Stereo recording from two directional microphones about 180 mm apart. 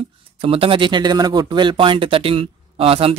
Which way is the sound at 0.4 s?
30° right (ahead or behind).